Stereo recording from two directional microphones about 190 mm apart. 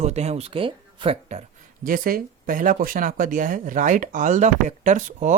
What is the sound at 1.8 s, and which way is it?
Speech, 45° right (ahead or behind).